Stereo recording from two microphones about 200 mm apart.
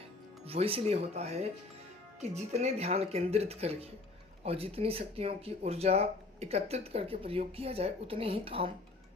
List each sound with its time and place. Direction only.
0.4 s speech: 30° right (ahead or behind)